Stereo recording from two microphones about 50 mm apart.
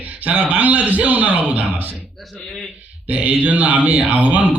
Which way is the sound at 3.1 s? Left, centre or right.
Right.